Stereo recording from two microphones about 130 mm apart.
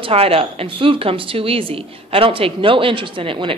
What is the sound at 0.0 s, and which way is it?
Speech, 50° right (ahead or behind).